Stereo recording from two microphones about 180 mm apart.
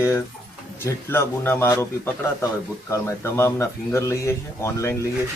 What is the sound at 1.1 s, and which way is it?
Speech, 15° left (ahead or behind).